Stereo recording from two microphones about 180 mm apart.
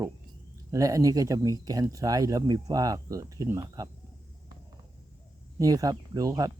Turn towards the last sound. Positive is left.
turn(degrees=-20)  # may be behind; listen again after turning